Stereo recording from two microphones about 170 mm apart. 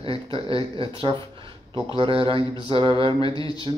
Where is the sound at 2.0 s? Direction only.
30° right (ahead or behind).